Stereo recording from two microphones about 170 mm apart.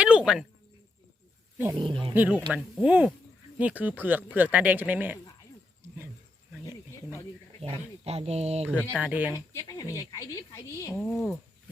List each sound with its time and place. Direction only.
0.0 s a sound: 5° right (ahead or behind)
1.7 s speech: 30° right (ahead or behind)
2.1 s speech: 10° right (ahead or behind)
6.5 s cricket: 15° right (ahead or behind)
7.6 s speech: 35° right (ahead or behind)
8.7 s speech: 10° left (ahead or behind)
9.0 s speech: 10° right (ahead or behind)
9.3 s a woman's voice: 20° left (ahead or behind)